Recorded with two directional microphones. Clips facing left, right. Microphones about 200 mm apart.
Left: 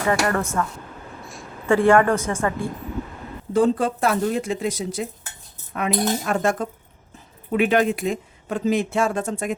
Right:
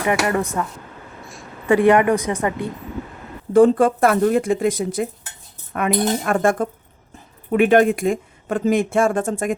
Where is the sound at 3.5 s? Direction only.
55° right (ahead or behind).